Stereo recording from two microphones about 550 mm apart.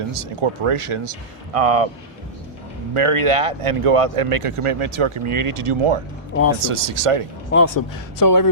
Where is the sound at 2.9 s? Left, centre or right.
Right.